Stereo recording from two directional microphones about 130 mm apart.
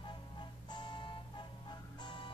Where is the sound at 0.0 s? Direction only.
35° left (ahead or behind).